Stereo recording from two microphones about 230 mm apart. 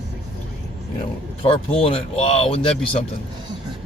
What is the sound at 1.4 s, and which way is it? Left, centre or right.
Speech, left.